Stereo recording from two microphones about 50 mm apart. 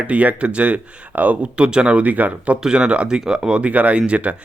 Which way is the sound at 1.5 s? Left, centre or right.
Right.